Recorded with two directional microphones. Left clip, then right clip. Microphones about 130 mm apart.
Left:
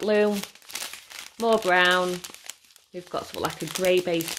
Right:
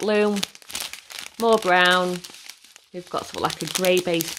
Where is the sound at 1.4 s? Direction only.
35° right (ahead or behind).